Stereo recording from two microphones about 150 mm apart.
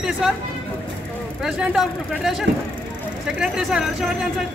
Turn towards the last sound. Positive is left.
turn(degrees=0)  # may be behind; listen again after turning